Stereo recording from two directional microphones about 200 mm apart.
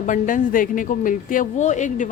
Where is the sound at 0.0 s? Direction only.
40° left (ahead or behind).